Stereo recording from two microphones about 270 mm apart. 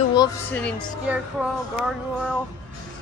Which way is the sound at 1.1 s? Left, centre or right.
Centre.